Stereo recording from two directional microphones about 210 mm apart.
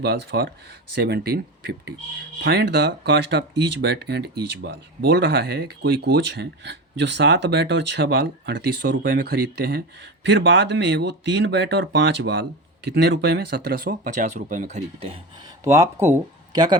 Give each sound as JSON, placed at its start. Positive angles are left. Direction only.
{"t": 0.0, "sound": "speech", "side_deg": -55}
{"t": 15.6, "sound": "speech", "side_deg": -15}